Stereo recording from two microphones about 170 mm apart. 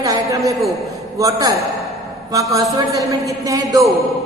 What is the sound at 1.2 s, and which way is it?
A woman's voice, 20° right (ahead or behind).